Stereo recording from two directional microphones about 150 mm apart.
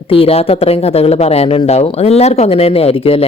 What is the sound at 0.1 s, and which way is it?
Speech, 40° left (ahead or behind).